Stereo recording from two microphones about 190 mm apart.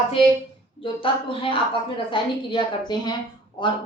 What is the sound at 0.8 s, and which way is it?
A woman's voice, 25° left (ahead or behind).